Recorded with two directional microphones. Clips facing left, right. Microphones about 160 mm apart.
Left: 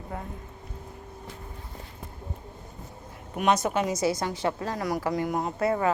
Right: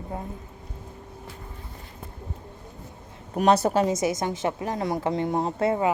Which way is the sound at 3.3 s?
35° right (ahead or behind).